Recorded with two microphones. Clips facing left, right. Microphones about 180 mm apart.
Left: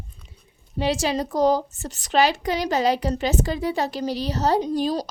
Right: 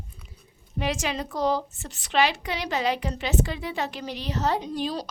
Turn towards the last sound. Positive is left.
turn(degrees=40)  # may be behind; listen again after turning